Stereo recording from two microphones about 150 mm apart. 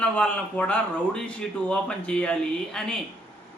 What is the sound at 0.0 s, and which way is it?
Speech, 10° left (ahead or behind).